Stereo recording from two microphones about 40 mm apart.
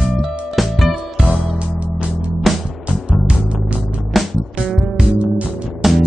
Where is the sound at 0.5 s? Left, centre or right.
Centre.